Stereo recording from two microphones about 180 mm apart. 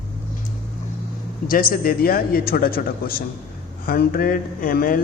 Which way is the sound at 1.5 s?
50° left (ahead or behind).